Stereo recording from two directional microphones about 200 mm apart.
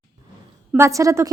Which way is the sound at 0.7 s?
15° right (ahead or behind).